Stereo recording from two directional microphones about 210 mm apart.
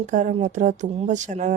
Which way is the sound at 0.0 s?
35° right (ahead or behind).